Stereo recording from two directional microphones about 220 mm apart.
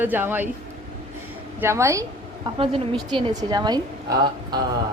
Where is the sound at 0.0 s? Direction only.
10° right (ahead or behind).